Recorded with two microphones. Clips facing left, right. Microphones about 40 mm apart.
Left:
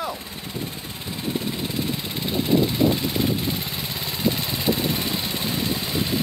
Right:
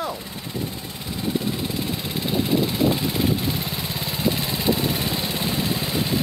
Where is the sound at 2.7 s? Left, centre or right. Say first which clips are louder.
Even; centre.